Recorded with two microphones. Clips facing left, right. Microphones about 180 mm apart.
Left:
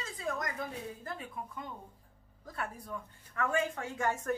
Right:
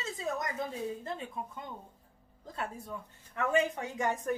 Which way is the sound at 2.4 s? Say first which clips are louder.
Right 2 dB; 25° right (ahead or behind).